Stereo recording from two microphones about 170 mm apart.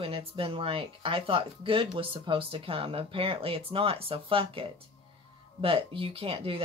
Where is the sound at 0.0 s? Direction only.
35° right (ahead or behind).